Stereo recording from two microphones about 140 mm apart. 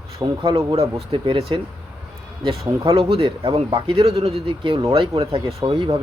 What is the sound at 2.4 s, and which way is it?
Speech, 40° right (ahead or behind).